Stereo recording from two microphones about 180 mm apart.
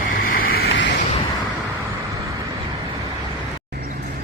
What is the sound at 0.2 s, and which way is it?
Boat, 50° left (ahead or behind).